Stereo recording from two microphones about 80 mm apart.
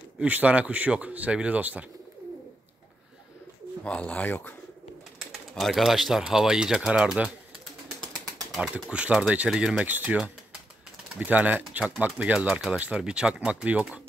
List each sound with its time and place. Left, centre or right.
0.2 s speech: centre
3.8 s speech: centre
5.5 s speech: centre
8.0 s bird: centre
8.9 s speech: centre
9.8 s speech: right
11.1 s speech: centre